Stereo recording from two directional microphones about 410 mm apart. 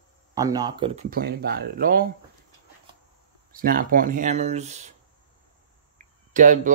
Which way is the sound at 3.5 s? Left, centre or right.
Right.